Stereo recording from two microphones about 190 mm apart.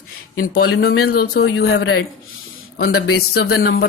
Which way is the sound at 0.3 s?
60° left (ahead or behind).